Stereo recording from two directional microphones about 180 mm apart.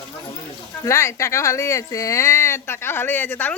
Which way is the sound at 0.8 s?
15° left (ahead or behind).